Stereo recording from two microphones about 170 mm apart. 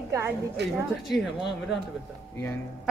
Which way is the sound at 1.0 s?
Centre (ahead or behind).